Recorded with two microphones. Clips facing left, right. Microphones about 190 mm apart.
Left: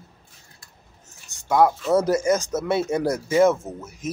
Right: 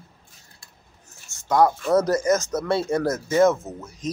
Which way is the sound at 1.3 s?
10° left (ahead or behind).